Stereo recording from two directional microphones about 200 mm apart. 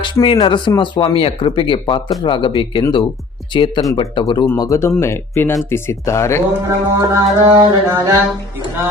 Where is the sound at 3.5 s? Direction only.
25° left (ahead or behind).